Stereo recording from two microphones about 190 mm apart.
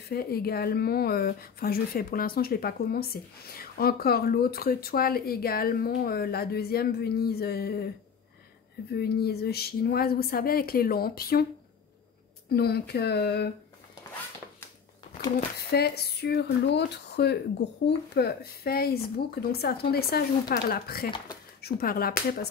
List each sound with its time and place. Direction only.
0.1 s speech: 55° left (ahead or behind)
8.9 s speech: 55° left (ahead or behind)
12.4 s speech: 55° left (ahead or behind)
15.7 s speech: 55° left (ahead or behind)